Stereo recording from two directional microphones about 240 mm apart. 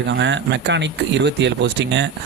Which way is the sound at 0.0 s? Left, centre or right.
Right.